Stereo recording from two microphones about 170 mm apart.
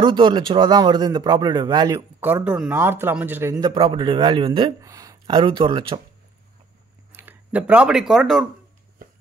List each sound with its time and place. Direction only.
0.0 s a man's voice: 25° right (ahead or behind)
3.7 s a man's voice: 30° right (ahead or behind)
4.8 s speech: 20° right (ahead or behind)
7.1 s speech: 10° right (ahead or behind)